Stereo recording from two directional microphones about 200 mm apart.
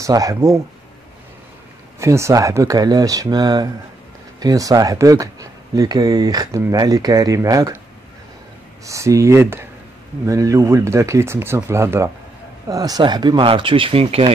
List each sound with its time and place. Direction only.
0.0 s speech: 15° right (ahead or behind)
2.0 s speech: 15° right (ahead or behind)
8.8 s speech: 15° right (ahead or behind)